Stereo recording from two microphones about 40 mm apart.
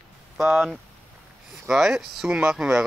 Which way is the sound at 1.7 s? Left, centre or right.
Centre.